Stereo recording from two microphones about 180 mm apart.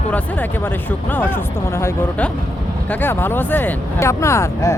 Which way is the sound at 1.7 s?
15° left (ahead or behind).